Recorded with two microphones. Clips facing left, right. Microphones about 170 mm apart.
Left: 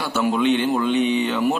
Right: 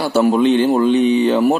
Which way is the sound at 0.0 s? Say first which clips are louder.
Right 6 dB; 35° right (ahead or behind).